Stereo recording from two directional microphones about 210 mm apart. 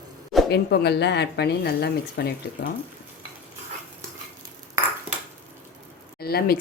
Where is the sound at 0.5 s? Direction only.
50° left (ahead or behind).